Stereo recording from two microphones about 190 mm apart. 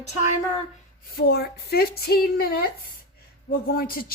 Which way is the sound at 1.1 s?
55° left (ahead or behind).